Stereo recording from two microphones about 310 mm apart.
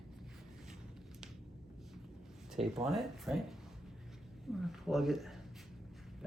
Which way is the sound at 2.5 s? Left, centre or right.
Centre.